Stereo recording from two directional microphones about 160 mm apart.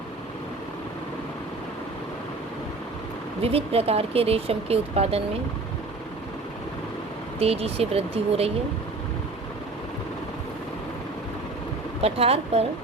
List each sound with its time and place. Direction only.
3.4 s speech: 40° right (ahead or behind)
7.3 s speech: 40° right (ahead or behind)
12.0 s speech: 40° right (ahead or behind)